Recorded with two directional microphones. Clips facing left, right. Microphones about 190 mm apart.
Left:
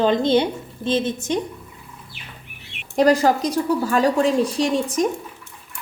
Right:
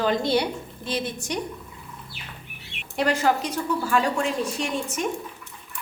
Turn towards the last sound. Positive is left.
turn(degrees=35)  # may be behind; listen again after turning